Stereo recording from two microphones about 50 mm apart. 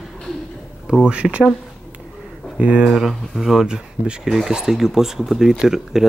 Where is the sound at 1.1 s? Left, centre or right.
Right.